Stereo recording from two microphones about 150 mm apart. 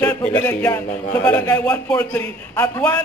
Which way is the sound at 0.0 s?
10° left (ahead or behind).